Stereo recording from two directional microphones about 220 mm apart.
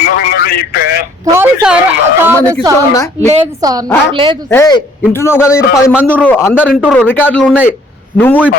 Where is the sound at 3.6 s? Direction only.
15° right (ahead or behind).